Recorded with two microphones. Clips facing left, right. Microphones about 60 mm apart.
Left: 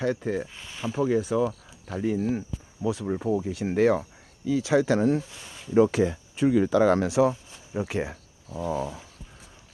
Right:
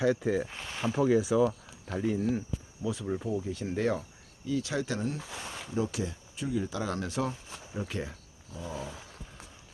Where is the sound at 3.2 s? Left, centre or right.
Left.